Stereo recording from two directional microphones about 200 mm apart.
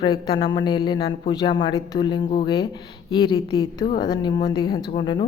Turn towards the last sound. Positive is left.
turn(degrees=20)  # may be behind; listen again after turning